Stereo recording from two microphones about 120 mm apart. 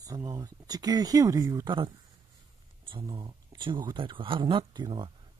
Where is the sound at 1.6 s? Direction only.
40° right (ahead or behind).